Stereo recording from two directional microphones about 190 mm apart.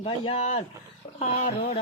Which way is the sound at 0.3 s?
35° left (ahead or behind).